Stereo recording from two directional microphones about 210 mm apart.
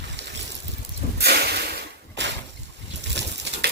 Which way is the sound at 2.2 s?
55° right (ahead or behind).